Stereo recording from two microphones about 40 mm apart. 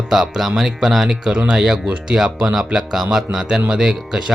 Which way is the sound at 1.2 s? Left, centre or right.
Centre.